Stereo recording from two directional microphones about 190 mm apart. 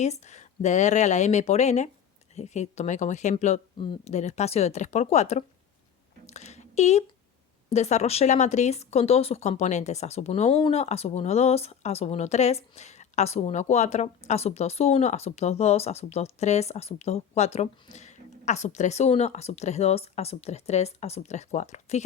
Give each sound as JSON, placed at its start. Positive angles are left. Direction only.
{"t": 0.0, "sound": "speech", "side_deg": 35}
{"t": 6.2, "sound": "a sound", "side_deg": 35}
{"t": 7.7, "sound": "speech", "side_deg": 35}